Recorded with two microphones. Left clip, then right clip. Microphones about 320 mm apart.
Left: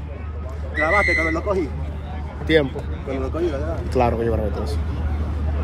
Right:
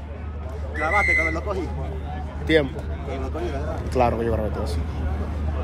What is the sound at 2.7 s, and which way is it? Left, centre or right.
Speech, centre.